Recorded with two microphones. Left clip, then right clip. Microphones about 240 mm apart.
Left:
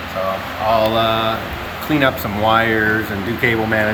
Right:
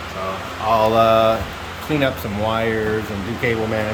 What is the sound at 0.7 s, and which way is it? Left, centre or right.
Speech, centre.